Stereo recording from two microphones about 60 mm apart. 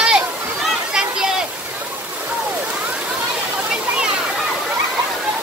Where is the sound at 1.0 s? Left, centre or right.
Centre.